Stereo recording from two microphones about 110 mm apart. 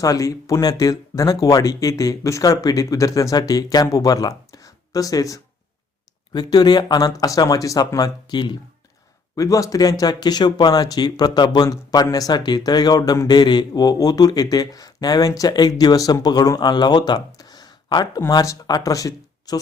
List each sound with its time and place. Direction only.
0.0 s speech: 30° left (ahead or behind)
9.3 s speech: 30° left (ahead or behind)